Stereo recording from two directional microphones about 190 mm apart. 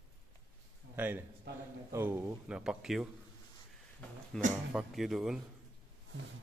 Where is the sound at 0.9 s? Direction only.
10° right (ahead or behind).